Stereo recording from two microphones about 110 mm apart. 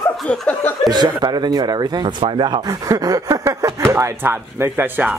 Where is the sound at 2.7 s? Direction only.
35° right (ahead or behind); by 5.1 s 15° right (ahead or behind).